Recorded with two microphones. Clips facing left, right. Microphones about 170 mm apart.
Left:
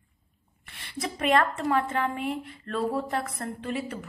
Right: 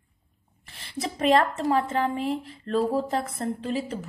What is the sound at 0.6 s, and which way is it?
A woman's voice, 30° right (ahead or behind).